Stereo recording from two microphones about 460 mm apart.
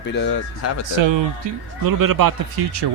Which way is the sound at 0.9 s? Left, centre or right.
Right.